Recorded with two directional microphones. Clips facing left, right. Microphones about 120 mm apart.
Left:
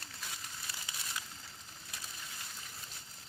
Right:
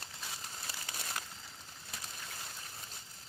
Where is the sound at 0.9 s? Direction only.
45° right (ahead or behind).